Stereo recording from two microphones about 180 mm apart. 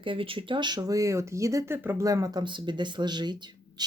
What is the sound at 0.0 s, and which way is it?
Speech, 30° right (ahead or behind).